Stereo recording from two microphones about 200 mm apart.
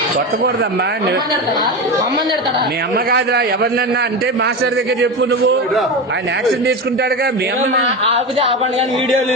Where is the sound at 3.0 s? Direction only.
50° right (ahead or behind).